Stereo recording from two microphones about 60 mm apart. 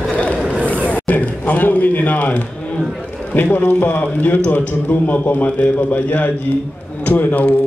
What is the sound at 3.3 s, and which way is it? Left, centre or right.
A man's voice, left.